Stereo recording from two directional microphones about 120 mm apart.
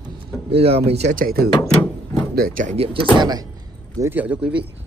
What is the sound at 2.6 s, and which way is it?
Speech, 70° right (ahead or behind).